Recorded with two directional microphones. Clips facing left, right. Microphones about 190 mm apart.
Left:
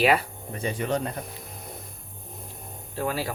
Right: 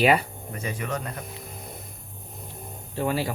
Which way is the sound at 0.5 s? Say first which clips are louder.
Left 4 dB; 30° left (ahead or behind).